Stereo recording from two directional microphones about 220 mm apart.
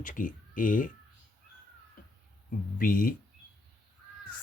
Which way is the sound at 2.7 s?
40° left (ahead or behind).